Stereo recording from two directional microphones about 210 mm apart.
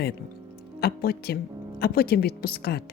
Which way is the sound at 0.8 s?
50° left (ahead or behind).